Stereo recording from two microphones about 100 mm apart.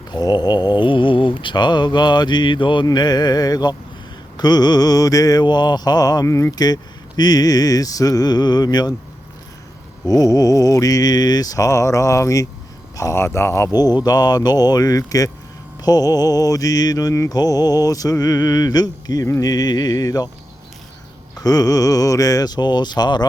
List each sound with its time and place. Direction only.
0.1 s mantra: 45° left (ahead or behind)
2.8 s mantra: 45° left (ahead or behind); by 6.5 s 30° left (ahead or behind)
6.5 s mantra: 40° left (ahead or behind)
10.1 s mantra: 40° left (ahead or behind)
13.0 s speech: 30° left (ahead or behind)
13.7 s mantra: 40° left (ahead or behind)
21.3 s mantra: 40° left (ahead or behind)